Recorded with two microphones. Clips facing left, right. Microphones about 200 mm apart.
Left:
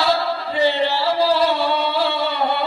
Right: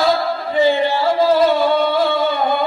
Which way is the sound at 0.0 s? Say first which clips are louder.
Right 3 dB; 50° right (ahead or behind).